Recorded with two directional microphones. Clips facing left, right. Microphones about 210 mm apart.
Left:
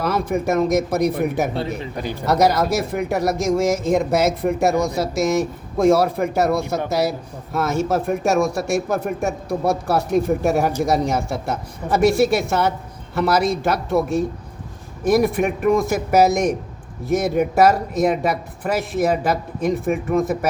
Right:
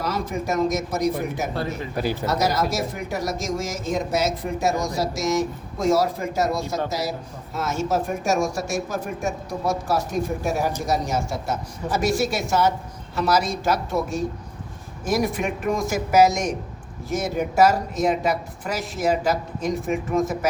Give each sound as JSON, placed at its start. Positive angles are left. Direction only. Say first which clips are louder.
{"t": 0.0, "sound": "a man's voice", "louder": "left 6 dB", "side_deg": 60}
{"t": 1.5, "sound": "speech", "louder": "left 3 dB", "side_deg": 25}
{"t": 2.2, "sound": "a man's voice", "louder": "left 8 dB", "side_deg": 60}